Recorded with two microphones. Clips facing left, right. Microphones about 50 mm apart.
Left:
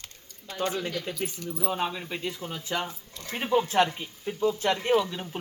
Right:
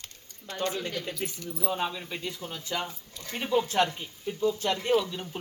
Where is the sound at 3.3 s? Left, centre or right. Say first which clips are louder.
Left 2 dB; centre.